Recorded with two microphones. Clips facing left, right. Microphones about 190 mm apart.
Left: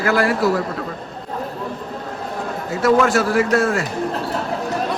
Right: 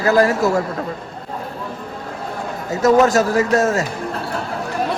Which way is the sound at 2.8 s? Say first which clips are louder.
Right 2 dB; 40° right (ahead or behind).